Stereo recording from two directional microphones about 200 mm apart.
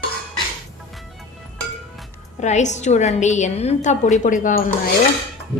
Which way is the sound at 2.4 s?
35° left (ahead or behind).